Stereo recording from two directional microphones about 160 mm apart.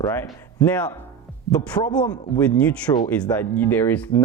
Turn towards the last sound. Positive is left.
turn(degrees=10)  # may be behind; listen again after turning